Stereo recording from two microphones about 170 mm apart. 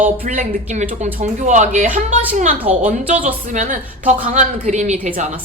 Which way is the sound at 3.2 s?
50° right (ahead or behind).